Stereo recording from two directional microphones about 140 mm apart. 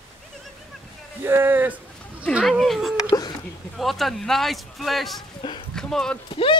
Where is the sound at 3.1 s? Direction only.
25° left (ahead or behind).